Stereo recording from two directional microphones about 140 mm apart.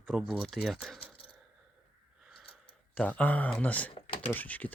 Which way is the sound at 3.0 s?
10° left (ahead or behind).